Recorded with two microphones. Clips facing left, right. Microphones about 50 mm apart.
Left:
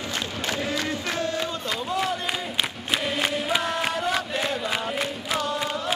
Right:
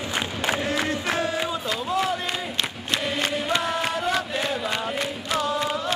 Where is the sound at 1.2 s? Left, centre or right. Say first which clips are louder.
Right 2 dB; centre.